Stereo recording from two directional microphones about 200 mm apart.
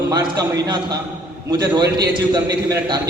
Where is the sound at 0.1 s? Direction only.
20° right (ahead or behind).